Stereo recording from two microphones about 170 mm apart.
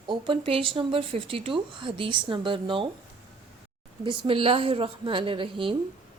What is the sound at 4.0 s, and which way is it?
A woman's voice, 30° right (ahead or behind).